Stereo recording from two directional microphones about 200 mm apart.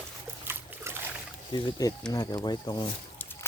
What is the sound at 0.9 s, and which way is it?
Boat, 15° right (ahead or behind).